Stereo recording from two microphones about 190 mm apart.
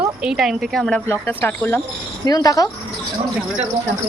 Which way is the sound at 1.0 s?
15° left (ahead or behind).